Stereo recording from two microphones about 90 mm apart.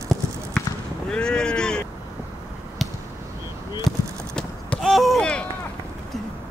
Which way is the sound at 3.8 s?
5° left (ahead or behind).